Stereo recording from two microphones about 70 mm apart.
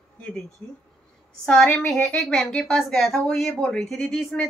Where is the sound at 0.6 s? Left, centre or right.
Left.